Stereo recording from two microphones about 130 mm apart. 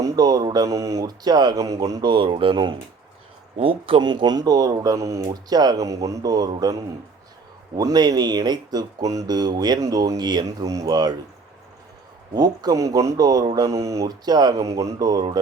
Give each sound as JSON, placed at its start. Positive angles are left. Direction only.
{"t": 0.0, "sound": "speech", "side_deg": -30}
{"t": 12.3, "sound": "speech", "side_deg": -30}